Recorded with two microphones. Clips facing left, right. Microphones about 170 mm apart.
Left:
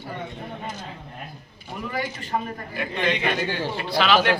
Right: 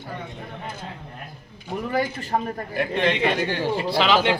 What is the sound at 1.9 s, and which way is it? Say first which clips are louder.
A woman's voice: right 4 dB; 50° right (ahead or behind).